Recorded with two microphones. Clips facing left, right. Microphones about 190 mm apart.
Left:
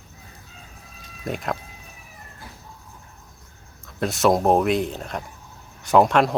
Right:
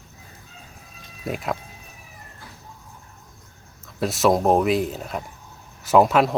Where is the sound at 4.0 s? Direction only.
Centre (ahead or behind).